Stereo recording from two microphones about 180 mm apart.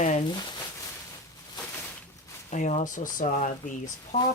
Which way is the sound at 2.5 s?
40° left (ahead or behind).